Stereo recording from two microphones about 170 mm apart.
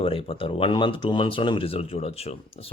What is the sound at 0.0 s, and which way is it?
Speech, 35° left (ahead or behind).